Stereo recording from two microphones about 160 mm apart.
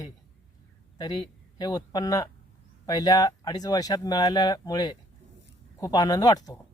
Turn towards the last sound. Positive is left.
turn(degrees=25)  # may be behind; listen again after turning